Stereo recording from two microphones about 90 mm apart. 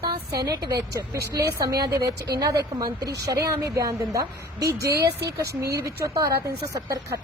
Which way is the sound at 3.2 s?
35° right (ahead or behind).